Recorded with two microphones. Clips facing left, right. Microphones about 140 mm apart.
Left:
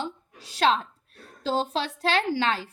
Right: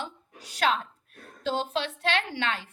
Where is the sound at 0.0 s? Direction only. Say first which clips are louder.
Left 4 dB; 30° left (ahead or behind).